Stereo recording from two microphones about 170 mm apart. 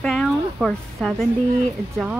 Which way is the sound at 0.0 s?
5° left (ahead or behind).